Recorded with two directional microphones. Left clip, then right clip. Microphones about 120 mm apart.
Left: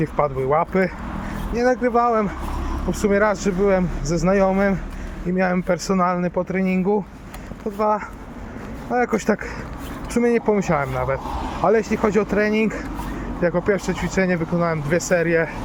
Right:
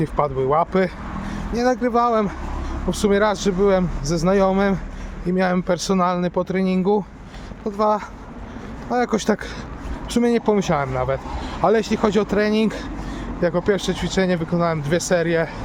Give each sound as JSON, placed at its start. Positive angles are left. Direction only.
{"t": 0.0, "sound": "speech", "side_deg": -15}